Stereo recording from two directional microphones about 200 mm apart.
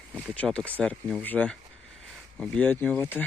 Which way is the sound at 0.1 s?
5° left (ahead or behind).